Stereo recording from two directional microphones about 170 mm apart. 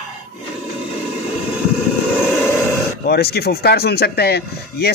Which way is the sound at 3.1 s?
70° left (ahead or behind).